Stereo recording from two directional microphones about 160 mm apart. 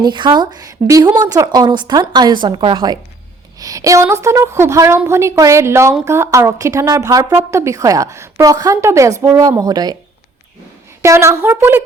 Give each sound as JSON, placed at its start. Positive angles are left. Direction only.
{"t": 0.0, "sound": "a woman's voice", "side_deg": -30}
{"t": 11.0, "sound": "a woman's voice", "side_deg": -20}